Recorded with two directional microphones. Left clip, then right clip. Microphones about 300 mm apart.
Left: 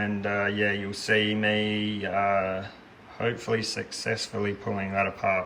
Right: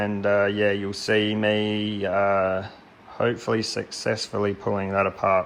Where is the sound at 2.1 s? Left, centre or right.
Right.